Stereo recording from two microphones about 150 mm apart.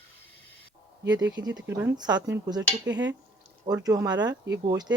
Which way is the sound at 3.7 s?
20° right (ahead or behind).